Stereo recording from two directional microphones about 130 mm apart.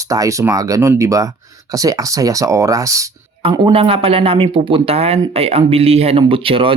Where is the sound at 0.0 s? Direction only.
25° right (ahead or behind).